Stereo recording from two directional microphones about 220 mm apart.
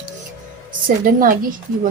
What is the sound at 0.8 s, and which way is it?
Speech, 40° right (ahead or behind).